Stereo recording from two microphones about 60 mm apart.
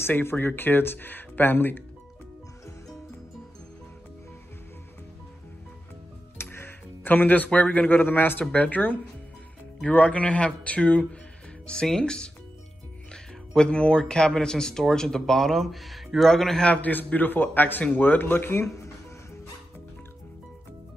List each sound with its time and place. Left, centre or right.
0.0 s speech: left
6.3 s a man's voice: left; by 16.6 s centre
16.6 s a man's voice: left